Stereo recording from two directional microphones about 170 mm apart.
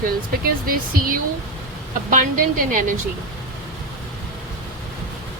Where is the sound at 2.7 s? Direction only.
50° right (ahead or behind).